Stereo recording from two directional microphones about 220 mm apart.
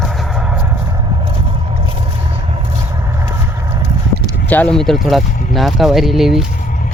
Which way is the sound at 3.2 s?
15° right (ahead or behind).